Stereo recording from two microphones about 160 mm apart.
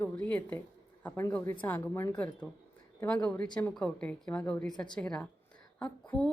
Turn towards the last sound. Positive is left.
turn(degrees=5)  # may be behind; listen again after turning